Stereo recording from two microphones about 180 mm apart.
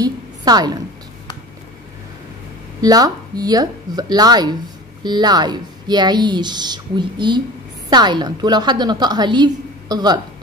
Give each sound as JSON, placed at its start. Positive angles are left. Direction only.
{"t": 0.0, "sound": "a woman's voice", "side_deg": -20}
{"t": 2.8, "sound": "a woman's voice", "side_deg": -20}